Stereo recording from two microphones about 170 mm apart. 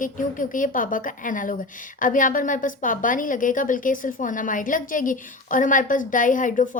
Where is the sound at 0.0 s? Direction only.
50° left (ahead or behind).